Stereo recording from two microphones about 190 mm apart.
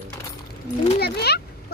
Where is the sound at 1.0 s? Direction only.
60° left (ahead or behind).